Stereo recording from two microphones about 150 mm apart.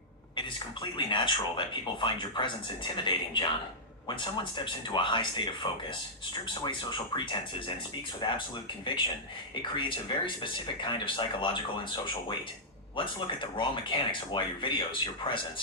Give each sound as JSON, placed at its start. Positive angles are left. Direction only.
{"t": 0.3, "sound": "speech", "side_deg": 35}